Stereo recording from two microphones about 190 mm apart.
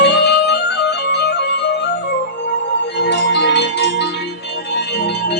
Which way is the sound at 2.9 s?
60° left (ahead or behind).